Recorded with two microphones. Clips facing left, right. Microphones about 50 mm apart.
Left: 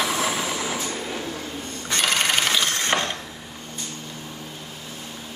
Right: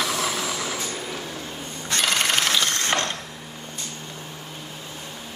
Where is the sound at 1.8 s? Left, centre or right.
Centre.